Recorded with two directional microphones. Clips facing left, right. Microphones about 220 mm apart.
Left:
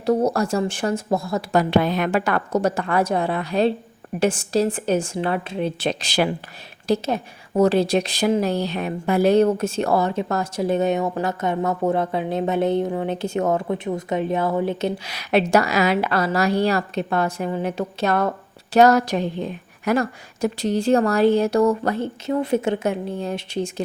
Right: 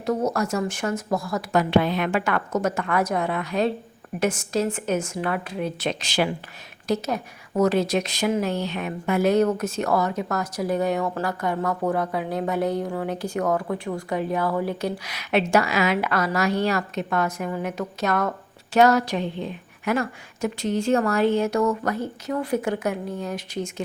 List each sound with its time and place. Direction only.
0.0 s a woman's voice: 30° left (ahead or behind)